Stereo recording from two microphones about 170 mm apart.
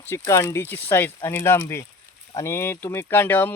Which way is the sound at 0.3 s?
15° left (ahead or behind).